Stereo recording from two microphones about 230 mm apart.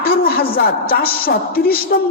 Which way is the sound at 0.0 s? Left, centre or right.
Left.